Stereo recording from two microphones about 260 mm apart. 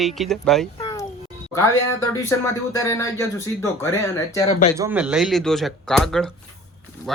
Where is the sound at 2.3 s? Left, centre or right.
Centre.